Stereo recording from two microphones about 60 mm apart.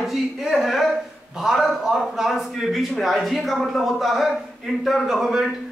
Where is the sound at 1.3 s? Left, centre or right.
Centre.